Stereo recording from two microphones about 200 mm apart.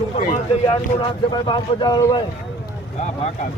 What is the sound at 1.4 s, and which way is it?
Speech, 25° left (ahead or behind).